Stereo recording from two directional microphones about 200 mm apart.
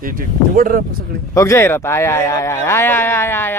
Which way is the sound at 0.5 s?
45° right (ahead or behind).